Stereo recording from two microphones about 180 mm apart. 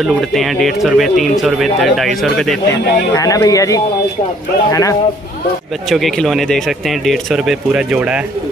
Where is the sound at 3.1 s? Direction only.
20° left (ahead or behind).